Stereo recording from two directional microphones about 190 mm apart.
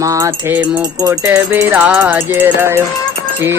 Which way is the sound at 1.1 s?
15° right (ahead or behind).